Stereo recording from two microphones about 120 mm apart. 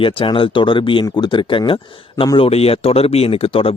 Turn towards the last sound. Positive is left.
turn(degrees=50)  # may be behind; listen again after turning